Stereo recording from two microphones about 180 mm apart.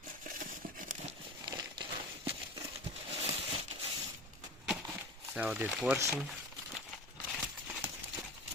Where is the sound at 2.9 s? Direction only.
35° right (ahead or behind).